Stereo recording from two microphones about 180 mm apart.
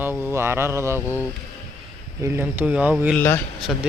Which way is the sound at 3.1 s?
10° left (ahead or behind).